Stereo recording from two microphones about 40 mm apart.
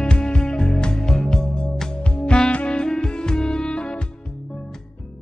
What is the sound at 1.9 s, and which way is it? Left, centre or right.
Music, left.